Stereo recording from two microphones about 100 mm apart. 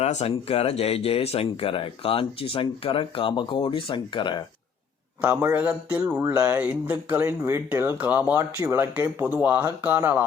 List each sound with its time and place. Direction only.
0.0 s speech: 90° left; by 4.4 s 50° left (ahead or behind)
5.2 s speech: 20° right (ahead or behind)